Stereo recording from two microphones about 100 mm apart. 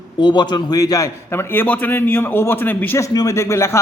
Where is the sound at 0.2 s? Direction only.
50° left (ahead or behind); by 3.0 s 20° left (ahead or behind).